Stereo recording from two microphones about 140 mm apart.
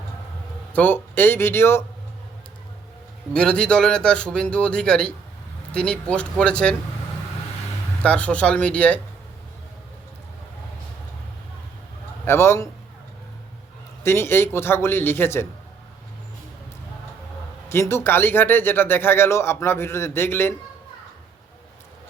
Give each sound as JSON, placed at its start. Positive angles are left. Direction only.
{"t": 0.7, "sound": "speech", "side_deg": 15}
{"t": 3.3, "sound": "speech", "side_deg": 5}
{"t": 8.0, "sound": "speech", "side_deg": 10}
{"t": 12.2, "sound": "speech", "side_deg": 20}
{"t": 14.0, "sound": "speech", "side_deg": 15}
{"t": 17.7, "sound": "speech", "side_deg": 20}